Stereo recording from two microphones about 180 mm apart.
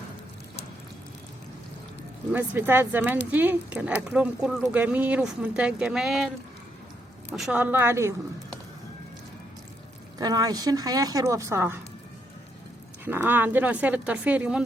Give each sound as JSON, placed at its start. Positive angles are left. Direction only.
{"t": 2.3, "sound": "speech", "side_deg": -10}
{"t": 7.3, "sound": "speech", "side_deg": -5}
{"t": 10.2, "sound": "speech", "side_deg": -20}
{"t": 13.1, "sound": "speech", "side_deg": -10}